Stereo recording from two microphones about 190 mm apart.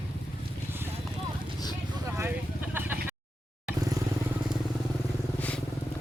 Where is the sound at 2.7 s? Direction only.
10° right (ahead or behind).